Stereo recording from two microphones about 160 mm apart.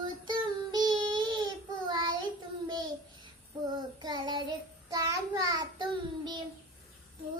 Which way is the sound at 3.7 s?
25° right (ahead or behind).